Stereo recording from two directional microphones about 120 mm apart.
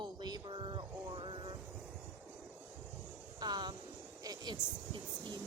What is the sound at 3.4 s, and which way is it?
A woman's voice, 35° right (ahead or behind).